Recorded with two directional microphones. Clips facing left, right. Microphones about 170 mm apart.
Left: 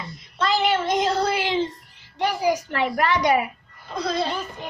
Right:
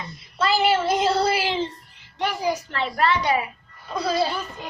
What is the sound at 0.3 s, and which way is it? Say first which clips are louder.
Child singing: right 1 dB; 5° right (ahead or behind).